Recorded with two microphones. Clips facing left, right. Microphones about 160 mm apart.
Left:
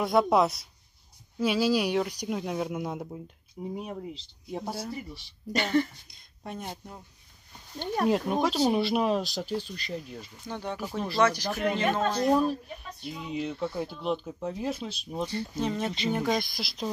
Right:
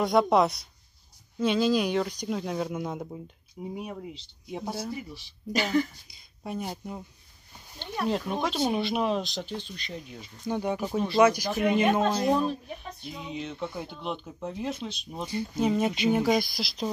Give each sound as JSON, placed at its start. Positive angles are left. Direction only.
{"t": 0.0, "sound": "speech", "side_deg": 5}
{"t": 8.1, "sound": "speech", "side_deg": 5}
{"t": 8.5, "sound": "speech", "side_deg": 35}
{"t": 8.7, "sound": "speech", "side_deg": 5}
{"t": 10.5, "sound": "speech", "side_deg": -15}
{"t": 13.2, "sound": "speech", "side_deg": 5}
{"t": 15.2, "sound": "speech", "side_deg": -10}